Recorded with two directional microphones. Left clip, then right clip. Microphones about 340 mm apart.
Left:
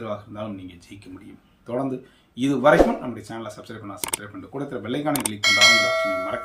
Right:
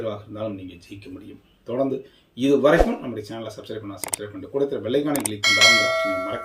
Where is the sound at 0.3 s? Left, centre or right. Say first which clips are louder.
Right 3 dB; centre.